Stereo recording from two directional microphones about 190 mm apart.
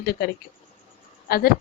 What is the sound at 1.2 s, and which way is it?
Speech, 55° left (ahead or behind).